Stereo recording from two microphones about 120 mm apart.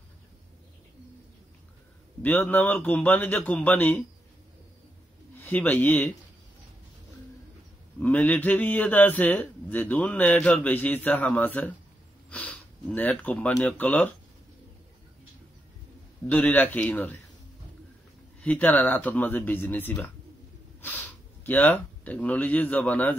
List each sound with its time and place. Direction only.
2.5 s a man's voice: 15° left (ahead or behind)
5.4 s a man's voice: 10° left (ahead or behind)
8.0 s a man's voice: 15° left (ahead or behind)
16.3 s a man's voice: 15° left (ahead or behind)
18.4 s a man's voice: 10° left (ahead or behind)